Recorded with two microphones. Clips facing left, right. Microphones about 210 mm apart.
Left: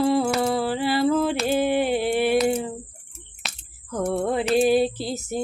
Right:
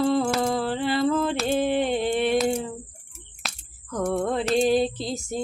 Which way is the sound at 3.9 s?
5° left (ahead or behind).